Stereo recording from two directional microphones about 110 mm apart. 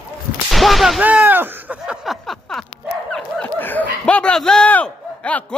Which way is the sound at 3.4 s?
20° left (ahead or behind).